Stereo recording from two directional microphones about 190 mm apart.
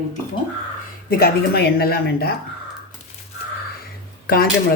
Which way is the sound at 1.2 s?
55° left (ahead or behind).